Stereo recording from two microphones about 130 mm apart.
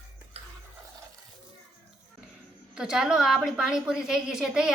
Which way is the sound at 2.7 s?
5° right (ahead or behind).